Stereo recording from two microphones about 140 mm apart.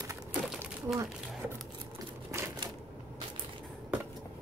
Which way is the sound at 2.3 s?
20° right (ahead or behind).